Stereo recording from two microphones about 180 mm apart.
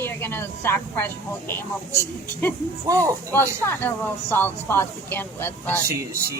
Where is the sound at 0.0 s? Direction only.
15° left (ahead or behind).